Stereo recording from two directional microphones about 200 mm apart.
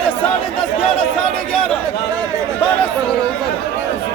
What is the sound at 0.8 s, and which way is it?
Chatter, 5° left (ahead or behind).